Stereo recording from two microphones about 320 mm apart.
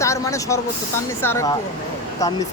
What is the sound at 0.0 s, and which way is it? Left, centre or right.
Vehicle, centre.